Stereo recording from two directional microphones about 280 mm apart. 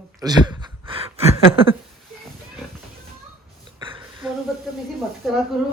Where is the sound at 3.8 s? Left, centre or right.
Centre.